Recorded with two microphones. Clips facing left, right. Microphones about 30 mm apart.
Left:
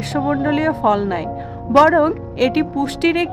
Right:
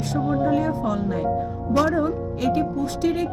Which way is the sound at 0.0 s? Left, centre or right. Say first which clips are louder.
Left 4 dB; left.